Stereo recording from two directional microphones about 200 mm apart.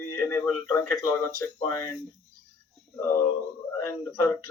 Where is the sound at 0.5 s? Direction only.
15° left (ahead or behind).